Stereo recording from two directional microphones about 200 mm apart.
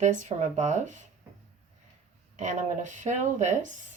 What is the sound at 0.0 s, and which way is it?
Speech, 35° right (ahead or behind).